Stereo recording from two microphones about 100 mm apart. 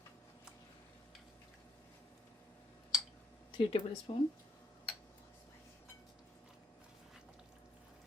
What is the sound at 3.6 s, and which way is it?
Speech, 60° left (ahead or behind).